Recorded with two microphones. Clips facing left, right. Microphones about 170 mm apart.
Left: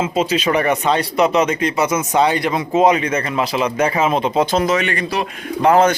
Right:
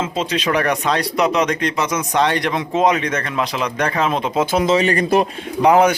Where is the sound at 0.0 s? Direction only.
5° left (ahead or behind).